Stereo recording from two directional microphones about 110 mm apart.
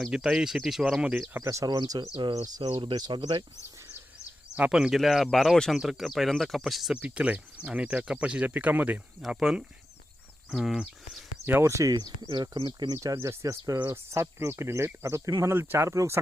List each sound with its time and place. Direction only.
0.0 s speech: 5° right (ahead or behind)
1.3 s speech: 25° right (ahead or behind); by 3.4 s 45° right (ahead or behind)
4.5 s speech: 10° right (ahead or behind)
7.0 s speech: 15° right (ahead or behind)
11.6 s speech: 30° right (ahead or behind)
13.1 s speech: 25° right (ahead or behind)